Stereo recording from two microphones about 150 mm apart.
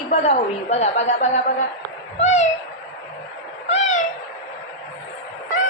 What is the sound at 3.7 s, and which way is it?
Cat, 50° left (ahead or behind).